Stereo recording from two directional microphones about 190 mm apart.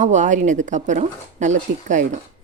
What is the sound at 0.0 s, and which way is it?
Speech, 40° right (ahead or behind).